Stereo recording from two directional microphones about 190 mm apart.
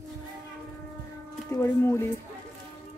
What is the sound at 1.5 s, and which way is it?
Speech, 15° left (ahead or behind).